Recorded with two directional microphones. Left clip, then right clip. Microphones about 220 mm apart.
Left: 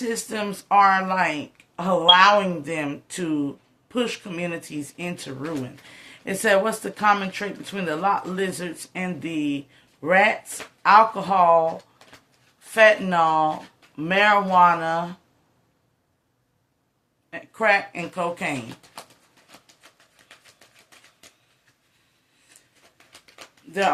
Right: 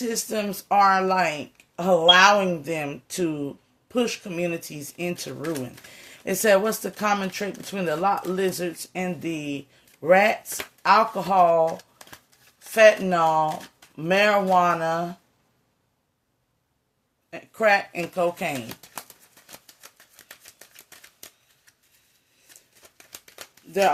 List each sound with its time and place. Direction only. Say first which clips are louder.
0.0 s speech: even; 45° right (ahead or behind)
17.3 s speech: even; 45° right (ahead or behind)
23.2 s a sound: right 1 dB; 55° right (ahead or behind)